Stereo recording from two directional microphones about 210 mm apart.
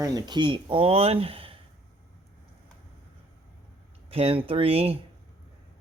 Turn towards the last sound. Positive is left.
turn(degrees=-25)  # may be behind; listen again after turning